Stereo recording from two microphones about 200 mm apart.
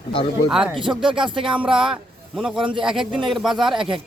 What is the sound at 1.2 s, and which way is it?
Speech, 25° right (ahead or behind).